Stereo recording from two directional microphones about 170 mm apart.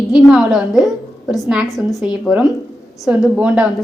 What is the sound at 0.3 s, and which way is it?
A woman's voice, 5° right (ahead or behind).